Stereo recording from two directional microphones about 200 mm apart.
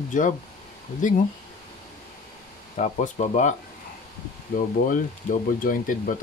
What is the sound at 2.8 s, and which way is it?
Speech, 35° left (ahead or behind).